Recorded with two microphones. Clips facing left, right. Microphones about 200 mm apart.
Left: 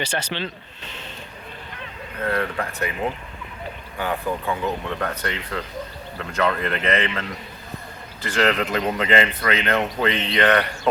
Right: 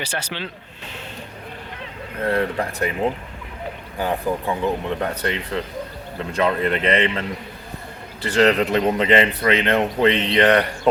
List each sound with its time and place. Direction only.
0.0 s speech: 10° right (ahead or behind)
2.2 s speech: 30° right (ahead or behind)
3.9 s speech: 30° right (ahead or behind)